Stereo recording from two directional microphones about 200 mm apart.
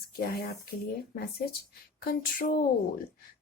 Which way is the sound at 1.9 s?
50° left (ahead or behind).